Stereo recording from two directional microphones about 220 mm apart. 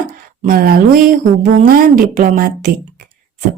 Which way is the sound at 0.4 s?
40° right (ahead or behind).